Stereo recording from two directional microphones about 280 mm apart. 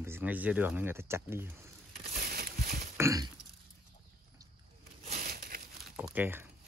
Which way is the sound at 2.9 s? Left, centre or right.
Centre.